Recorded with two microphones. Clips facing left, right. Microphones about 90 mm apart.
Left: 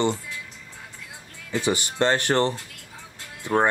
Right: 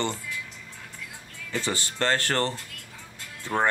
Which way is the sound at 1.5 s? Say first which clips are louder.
Left 5 dB; 15° left (ahead or behind).